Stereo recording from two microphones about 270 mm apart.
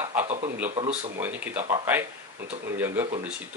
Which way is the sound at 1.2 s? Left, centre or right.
Centre.